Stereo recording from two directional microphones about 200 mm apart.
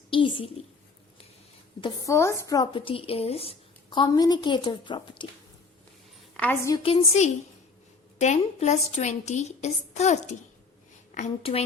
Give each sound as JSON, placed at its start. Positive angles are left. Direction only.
{"t": 0.1, "sound": "a woman's voice", "side_deg": 25}
{"t": 1.8, "sound": "a woman's voice", "side_deg": 15}
{"t": 6.3, "sound": "a woman's voice", "side_deg": 10}
{"t": 6.8, "sound": "a woman's voice", "side_deg": 30}